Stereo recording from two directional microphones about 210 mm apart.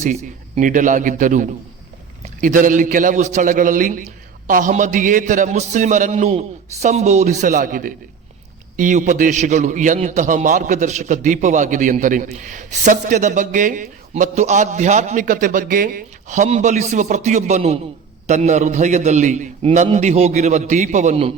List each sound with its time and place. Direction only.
0.0 s a man's voice: 35° right (ahead or behind)